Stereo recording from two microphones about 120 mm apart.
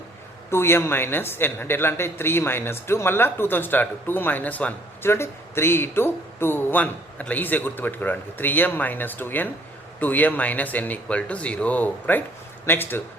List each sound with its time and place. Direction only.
0.5 s speech: 20° left (ahead or behind)